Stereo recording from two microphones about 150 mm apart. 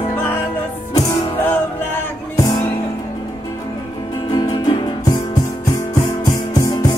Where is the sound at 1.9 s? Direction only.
25° left (ahead or behind).